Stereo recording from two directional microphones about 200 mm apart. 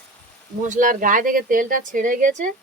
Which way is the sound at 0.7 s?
40° right (ahead or behind).